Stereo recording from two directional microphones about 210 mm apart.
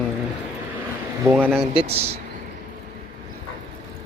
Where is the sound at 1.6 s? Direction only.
25° right (ahead or behind).